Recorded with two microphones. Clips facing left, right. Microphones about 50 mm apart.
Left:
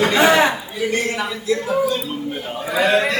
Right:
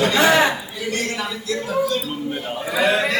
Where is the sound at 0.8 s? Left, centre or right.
Left.